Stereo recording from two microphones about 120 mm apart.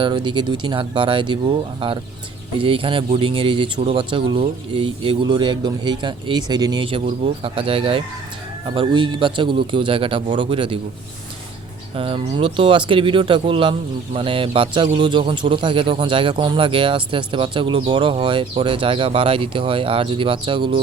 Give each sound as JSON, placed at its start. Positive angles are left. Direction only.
{"t": 0.0, "sound": "speech", "side_deg": -40}
{"t": 11.9, "sound": "speech", "side_deg": -45}